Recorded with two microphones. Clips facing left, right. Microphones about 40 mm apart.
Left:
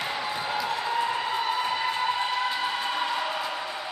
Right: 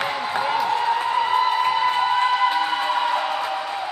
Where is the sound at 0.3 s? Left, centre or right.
Right.